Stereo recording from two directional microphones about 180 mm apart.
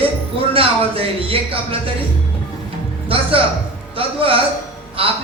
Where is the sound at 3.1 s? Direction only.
30° right (ahead or behind).